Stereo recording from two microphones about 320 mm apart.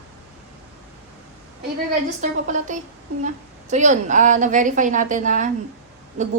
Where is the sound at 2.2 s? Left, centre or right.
Right.